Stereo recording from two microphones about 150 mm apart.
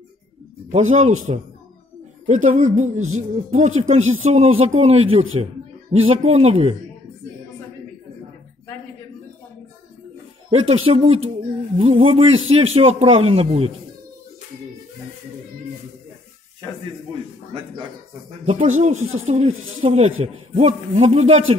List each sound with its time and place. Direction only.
0.7 s a man's voice: 50° right (ahead or behind)
10.5 s a man's voice: 35° right (ahead or behind)
18.4 s speech: 45° right (ahead or behind)